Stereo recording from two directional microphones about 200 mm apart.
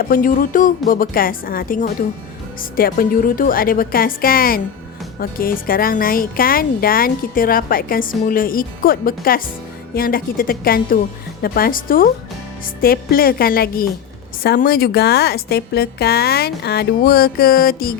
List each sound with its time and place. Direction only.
0.1 s music: 40° left (ahead or behind)
0.9 s speech: 45° left (ahead or behind)